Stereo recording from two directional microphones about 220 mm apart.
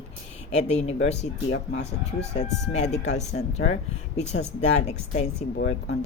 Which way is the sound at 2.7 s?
30° left (ahead or behind).